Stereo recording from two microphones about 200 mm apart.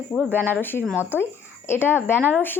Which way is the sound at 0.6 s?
10° left (ahead or behind).